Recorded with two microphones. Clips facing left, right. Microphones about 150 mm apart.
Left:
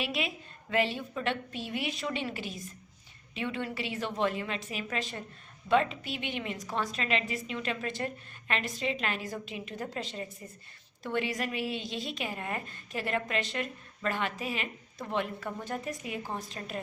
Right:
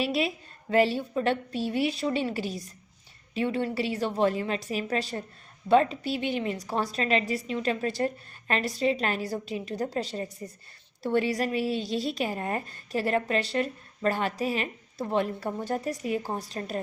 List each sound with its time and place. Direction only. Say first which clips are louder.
0.0 s a woman's voice: right 6 dB; 35° right (ahead or behind)